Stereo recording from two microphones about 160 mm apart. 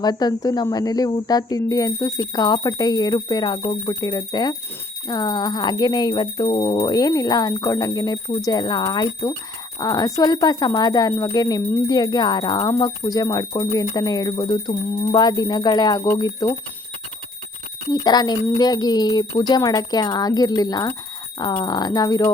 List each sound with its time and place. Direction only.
0.0 s speech: 25° left (ahead or behind)
18.0 s speech: 25° left (ahead or behind)